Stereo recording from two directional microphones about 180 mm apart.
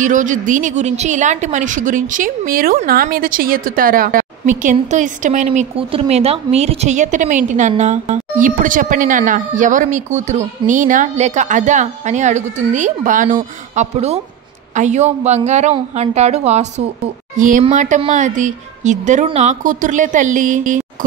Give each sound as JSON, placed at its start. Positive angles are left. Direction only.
{"t": 0.0, "sound": "a woman's voice", "side_deg": -45}